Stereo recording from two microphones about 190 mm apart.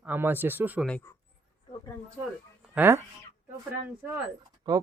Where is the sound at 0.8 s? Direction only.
10° left (ahead or behind).